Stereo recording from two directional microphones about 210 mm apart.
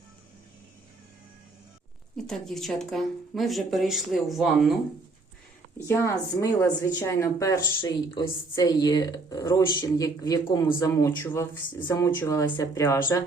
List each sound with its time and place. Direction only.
2.1 s speech: centre (ahead or behind)
5.9 s speech: 15° left (ahead or behind)